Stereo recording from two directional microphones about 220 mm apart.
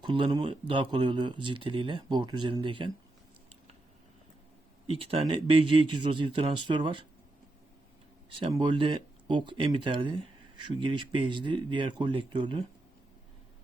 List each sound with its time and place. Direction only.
0.0 s speech: 20° right (ahead or behind)
4.9 s speech: 25° right (ahead or behind)
8.3 s speech: 25° right (ahead or behind)